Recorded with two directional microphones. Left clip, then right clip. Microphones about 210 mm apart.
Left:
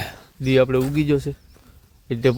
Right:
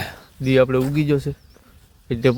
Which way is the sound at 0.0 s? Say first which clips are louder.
Right 1 dB; centre (ahead or behind).